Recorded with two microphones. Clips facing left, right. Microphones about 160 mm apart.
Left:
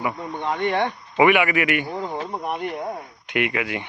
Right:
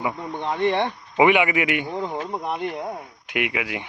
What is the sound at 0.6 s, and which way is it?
A man's voice, 25° right (ahead or behind).